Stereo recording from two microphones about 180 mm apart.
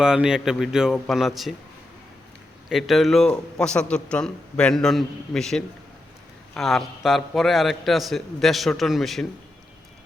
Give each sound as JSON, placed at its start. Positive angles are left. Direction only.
{"t": 0.0, "sound": "a man's voice", "side_deg": -5}
{"t": 2.6, "sound": "a man's voice", "side_deg": 0}